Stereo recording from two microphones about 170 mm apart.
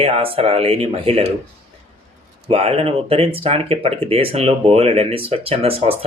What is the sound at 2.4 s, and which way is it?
Speech, 35° right (ahead or behind).